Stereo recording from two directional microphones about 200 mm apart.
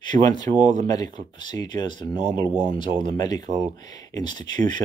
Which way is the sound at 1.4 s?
20° left (ahead or behind).